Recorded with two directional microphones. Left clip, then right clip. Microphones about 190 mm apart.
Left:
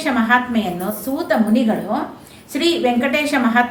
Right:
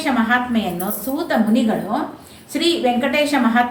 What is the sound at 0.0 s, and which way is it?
A woman's voice, 15° left (ahead or behind).